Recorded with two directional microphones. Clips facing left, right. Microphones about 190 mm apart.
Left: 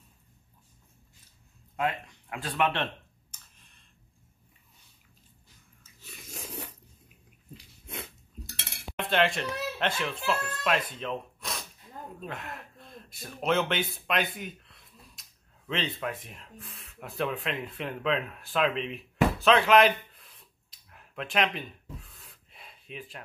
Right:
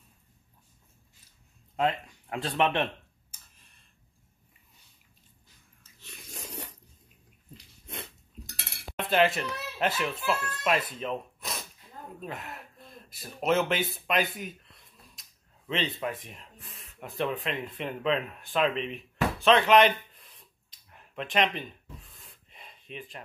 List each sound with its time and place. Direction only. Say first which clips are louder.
1.8 s speech: right 3 dB; 30° right (ahead or behind)
6.0 s biting: left 1 dB; centre (ahead or behind)
7.5 s dog: left 1 dB; 5° left (ahead or behind)
8.8 s speech: right 2 dB; 5° right (ahead or behind)